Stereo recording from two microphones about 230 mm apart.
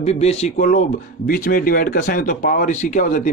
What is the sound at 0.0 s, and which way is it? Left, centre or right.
A man's voice, left.